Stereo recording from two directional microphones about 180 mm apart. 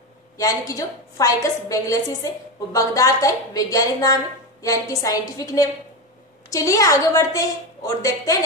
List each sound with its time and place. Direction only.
0.4 s a woman's voice: 20° left (ahead or behind)